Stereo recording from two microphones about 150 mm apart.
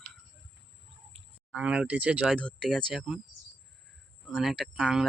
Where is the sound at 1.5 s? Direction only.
10° right (ahead or behind).